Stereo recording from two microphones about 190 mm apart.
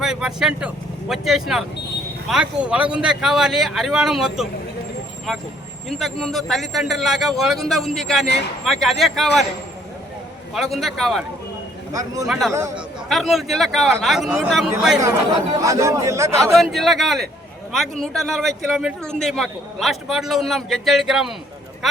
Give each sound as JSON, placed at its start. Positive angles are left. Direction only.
{"t": 0.0, "sound": "a man's voice", "side_deg": -5}
{"t": 5.9, "sound": "a man's voice", "side_deg": 0}
{"t": 10.8, "sound": "a man's voice", "side_deg": 0}
{"t": 11.9, "sound": "a man's voice", "side_deg": -15}
{"t": 13.1, "sound": "a man's voice", "side_deg": 0}
{"t": 15.6, "sound": "a man's voice", "side_deg": -15}
{"t": 16.6, "sound": "a man's voice", "side_deg": 0}